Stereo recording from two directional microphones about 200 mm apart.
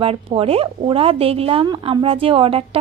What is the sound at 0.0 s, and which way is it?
A woman's voice, 30° right (ahead or behind).